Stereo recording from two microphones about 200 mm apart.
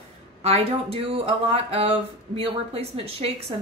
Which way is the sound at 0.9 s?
30° right (ahead or behind).